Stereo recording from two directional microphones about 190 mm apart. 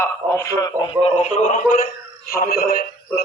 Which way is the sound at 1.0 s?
35° left (ahead or behind).